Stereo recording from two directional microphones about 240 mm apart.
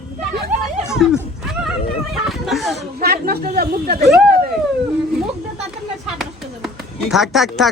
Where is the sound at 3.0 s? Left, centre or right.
Right.